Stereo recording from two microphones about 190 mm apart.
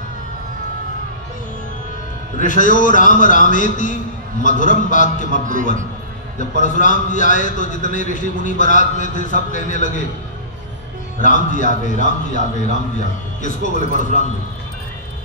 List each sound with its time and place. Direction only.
2.3 s a man's voice: 45° left (ahead or behind)
11.2 s a man's voice: 40° left (ahead or behind)